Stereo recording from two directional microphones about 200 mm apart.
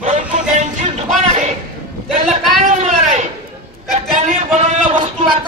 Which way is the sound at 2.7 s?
35° right (ahead or behind).